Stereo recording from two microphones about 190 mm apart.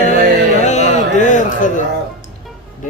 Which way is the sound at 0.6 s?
40° left (ahead or behind).